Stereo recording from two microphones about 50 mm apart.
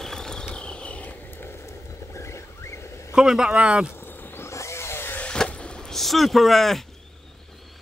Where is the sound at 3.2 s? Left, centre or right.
Centre.